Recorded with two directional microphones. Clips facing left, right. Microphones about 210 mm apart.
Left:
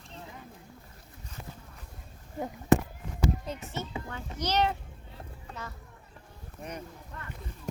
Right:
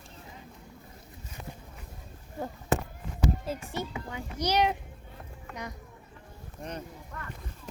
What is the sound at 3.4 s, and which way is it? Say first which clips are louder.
A child's voice: right 3 dB; 10° right (ahead or behind).